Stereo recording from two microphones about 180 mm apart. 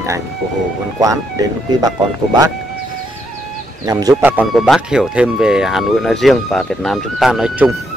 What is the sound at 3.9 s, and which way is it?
Speech, 20° right (ahead or behind).